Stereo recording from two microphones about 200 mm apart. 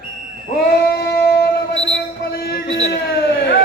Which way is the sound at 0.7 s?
55° left (ahead or behind).